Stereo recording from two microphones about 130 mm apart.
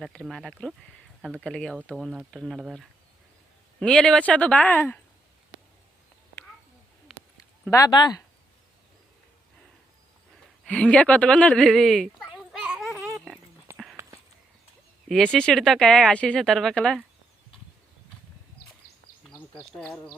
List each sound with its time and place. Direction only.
0.0 s speech: 5° left (ahead or behind)
3.8 s speech: 5° left (ahead or behind)
7.7 s speech: 30° left (ahead or behind)
10.7 s speech: 10° left (ahead or behind)
12.4 s gargling: centre (ahead or behind)
12.6 s a sound: 10° right (ahead or behind)
14.0 s a sound: 20° right (ahead or behind)
15.1 s speech: 5° left (ahead or behind)
19.7 s speech: 5° left (ahead or behind)